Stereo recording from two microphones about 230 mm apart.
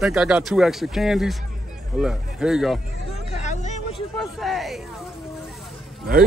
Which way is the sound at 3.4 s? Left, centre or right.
Left.